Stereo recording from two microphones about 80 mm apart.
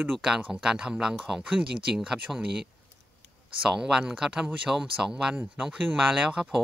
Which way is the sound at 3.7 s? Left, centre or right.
Centre.